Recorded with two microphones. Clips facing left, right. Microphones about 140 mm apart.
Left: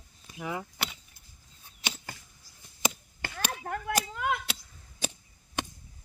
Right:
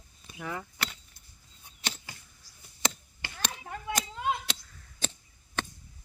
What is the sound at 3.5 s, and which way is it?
Chop, 60° left (ahead or behind).